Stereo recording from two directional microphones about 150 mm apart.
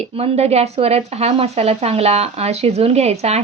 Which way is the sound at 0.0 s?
45° right (ahead or behind).